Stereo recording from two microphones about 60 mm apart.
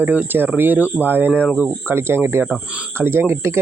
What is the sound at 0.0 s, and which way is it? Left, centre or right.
Speech, right.